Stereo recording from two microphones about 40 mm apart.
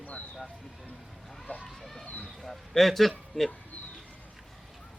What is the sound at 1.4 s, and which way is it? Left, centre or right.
Speech, left.